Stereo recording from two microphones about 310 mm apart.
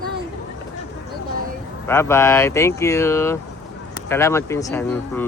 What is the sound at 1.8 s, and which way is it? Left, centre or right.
Speech, centre.